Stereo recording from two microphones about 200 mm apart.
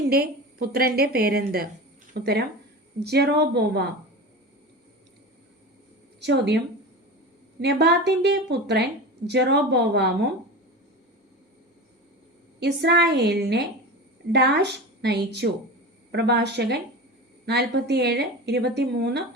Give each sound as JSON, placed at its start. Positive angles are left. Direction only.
{"t": 0.1, "sound": "a woman's voice", "side_deg": -50}
{"t": 6.1, "sound": "speech", "side_deg": -55}
{"t": 7.6, "sound": "a woman's voice", "side_deg": -55}
{"t": 12.5, "sound": "a woman's voice", "side_deg": -55}